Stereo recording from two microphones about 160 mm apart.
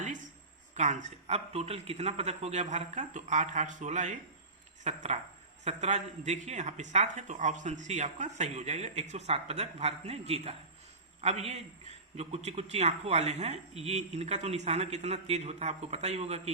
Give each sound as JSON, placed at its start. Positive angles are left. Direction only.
{"t": 0.8, "sound": "speech", "side_deg": -50}